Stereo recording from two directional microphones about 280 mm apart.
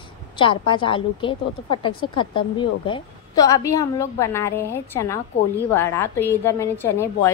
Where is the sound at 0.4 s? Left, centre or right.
Centre.